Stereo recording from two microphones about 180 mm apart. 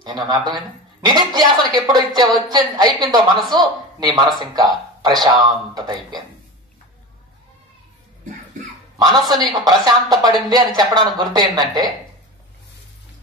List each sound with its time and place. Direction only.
0.3 s speech: 20° right (ahead or behind)
8.9 s a woman's voice: 25° right (ahead or behind)